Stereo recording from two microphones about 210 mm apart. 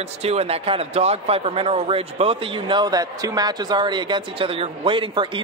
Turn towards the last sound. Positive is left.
turn(degrees=-25)  # may be behind; listen again after turning